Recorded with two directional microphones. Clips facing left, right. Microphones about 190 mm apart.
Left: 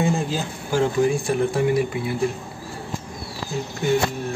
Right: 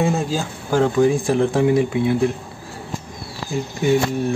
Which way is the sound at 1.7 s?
25° right (ahead or behind).